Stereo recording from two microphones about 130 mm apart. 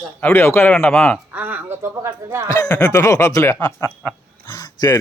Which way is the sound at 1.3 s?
15° right (ahead or behind).